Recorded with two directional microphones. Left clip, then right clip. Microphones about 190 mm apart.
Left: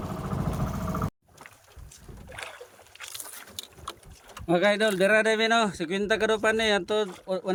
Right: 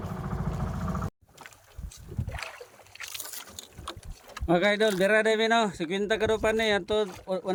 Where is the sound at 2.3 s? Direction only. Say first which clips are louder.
Even; 30° right (ahead or behind).